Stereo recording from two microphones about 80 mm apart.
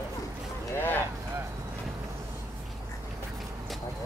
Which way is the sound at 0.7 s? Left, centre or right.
Left.